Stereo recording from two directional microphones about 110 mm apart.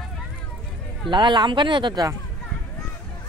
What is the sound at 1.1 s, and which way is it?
Speech, 45° right (ahead or behind).